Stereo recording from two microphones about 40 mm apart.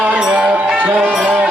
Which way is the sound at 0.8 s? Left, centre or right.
Right.